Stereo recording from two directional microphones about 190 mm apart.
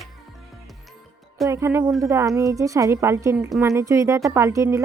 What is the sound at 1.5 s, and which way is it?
A woman's voice, 15° right (ahead or behind).